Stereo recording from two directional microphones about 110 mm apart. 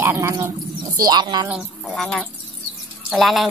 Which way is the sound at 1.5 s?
5° right (ahead or behind).